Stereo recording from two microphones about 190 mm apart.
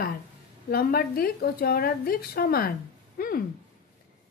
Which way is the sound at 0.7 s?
50° left (ahead or behind).